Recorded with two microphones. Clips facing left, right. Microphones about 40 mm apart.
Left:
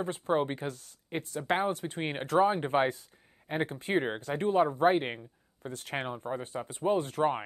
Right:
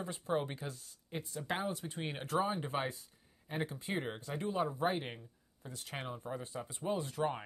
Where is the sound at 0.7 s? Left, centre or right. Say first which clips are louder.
Left 7 dB; left.